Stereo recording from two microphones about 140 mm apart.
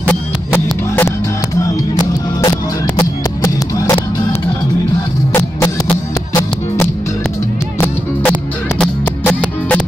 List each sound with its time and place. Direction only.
0.0 s music: 15° left (ahead or behind)
7.8 s music: 10° left (ahead or behind)